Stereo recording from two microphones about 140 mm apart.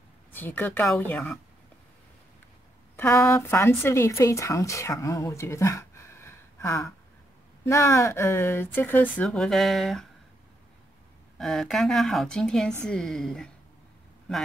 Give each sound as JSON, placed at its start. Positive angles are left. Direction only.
{"t": 0.3, "sound": "a woman's voice", "side_deg": 15}
{"t": 3.0, "sound": "a woman's voice", "side_deg": 15}
{"t": 11.3, "sound": "a woman's voice", "side_deg": 5}